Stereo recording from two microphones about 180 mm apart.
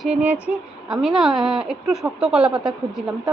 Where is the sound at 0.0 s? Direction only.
5° right (ahead or behind).